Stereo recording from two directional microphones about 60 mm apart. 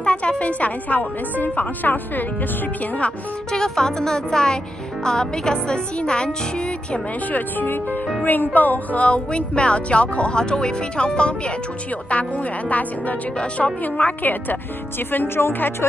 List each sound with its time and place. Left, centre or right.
0.0 s speech: centre
3.5 s speech: centre
6.9 s speech: left